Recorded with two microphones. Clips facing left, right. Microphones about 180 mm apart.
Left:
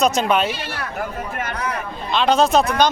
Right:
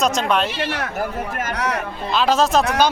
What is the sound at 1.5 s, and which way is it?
Speech, 75° right (ahead or behind).